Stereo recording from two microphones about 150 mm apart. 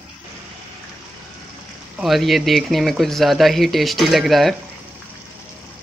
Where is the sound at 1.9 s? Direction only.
Centre (ahead or behind).